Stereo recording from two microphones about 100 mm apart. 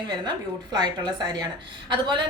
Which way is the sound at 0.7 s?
45° right (ahead or behind).